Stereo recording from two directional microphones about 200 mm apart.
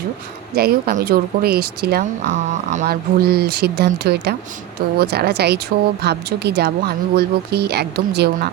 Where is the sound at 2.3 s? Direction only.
35° right (ahead or behind).